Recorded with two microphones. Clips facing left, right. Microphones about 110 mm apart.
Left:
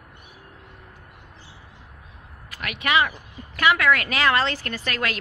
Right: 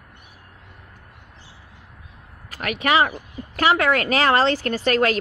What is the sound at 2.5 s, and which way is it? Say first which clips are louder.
A woman's voice: right 3 dB; 40° right (ahead or behind).